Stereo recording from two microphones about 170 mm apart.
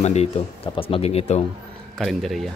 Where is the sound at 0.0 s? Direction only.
40° left (ahead or behind).